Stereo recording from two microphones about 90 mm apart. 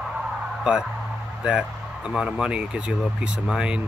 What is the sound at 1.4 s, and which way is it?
Speech, 10° right (ahead or behind).